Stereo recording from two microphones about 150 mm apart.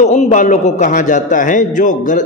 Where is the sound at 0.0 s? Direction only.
50° left (ahead or behind).